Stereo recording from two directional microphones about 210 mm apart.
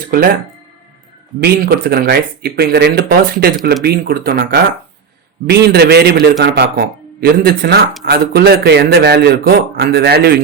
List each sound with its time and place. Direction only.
1.4 s speech: 50° right (ahead or behind)